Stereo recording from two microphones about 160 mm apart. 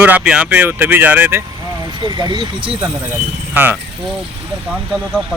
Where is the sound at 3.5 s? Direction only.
10° right (ahead or behind).